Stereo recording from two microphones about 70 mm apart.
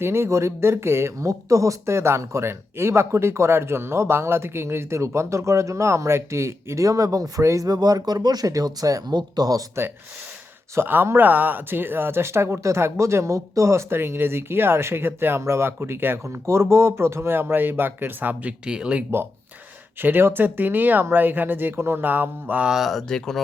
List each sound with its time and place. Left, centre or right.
0.0 s speech: right
7.7 s speech: right
10.8 s speech: right
18.6 s speech: centre
20.0 s speech: right
22.7 s speech: centre